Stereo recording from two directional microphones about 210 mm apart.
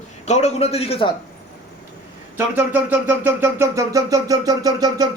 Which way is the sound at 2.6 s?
10° right (ahead or behind).